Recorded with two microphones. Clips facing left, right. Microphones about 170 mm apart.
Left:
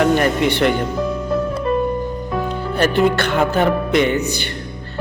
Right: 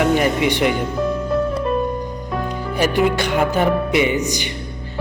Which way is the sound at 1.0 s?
Centre (ahead or behind).